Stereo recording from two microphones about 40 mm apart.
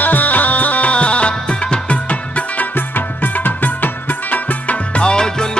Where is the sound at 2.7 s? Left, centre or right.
Left.